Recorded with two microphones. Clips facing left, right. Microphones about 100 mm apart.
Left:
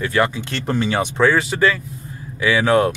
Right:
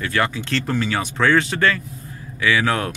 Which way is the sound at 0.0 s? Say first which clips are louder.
Left 3 dB; 20° left (ahead or behind).